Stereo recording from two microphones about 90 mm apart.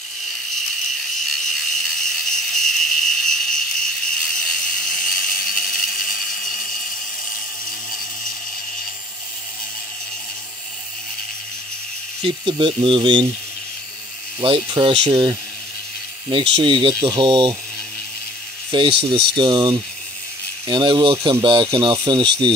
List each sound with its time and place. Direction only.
1.1 s a sound: 5° left (ahead or behind)
7.9 s tools: 5° left (ahead or behind)
12.2 s speech: 70° right (ahead or behind)
14.4 s speech: 75° right (ahead or behind)
17.0 s speech: 50° right (ahead or behind)
18.7 s speech: 70° right (ahead or behind)